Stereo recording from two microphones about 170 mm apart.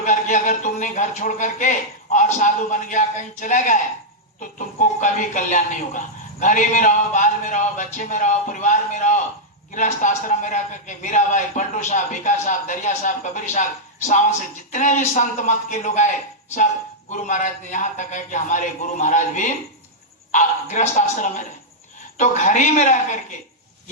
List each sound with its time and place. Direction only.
0.0 s a sound: 45° left (ahead or behind)
2.1 s a man's voice: 45° left (ahead or behind)
17.1 s a man's voice: 45° left (ahead or behind)